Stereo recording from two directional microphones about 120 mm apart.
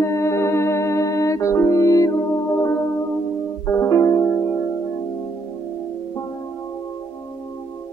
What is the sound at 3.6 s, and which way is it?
Music, 25° left (ahead or behind).